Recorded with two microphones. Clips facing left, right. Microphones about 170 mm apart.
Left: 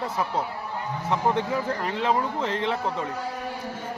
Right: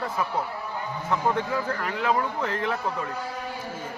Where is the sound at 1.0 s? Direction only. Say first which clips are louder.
Left 1 dB; 20° left (ahead or behind).